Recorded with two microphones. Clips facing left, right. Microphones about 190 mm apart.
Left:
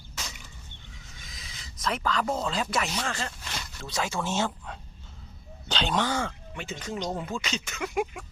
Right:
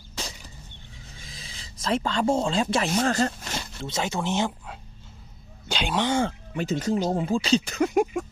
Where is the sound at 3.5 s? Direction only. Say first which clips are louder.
Right 3 dB; 25° right (ahead or behind).